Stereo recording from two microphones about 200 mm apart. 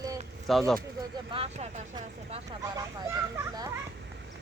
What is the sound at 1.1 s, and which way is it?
Speech, 25° right (ahead or behind).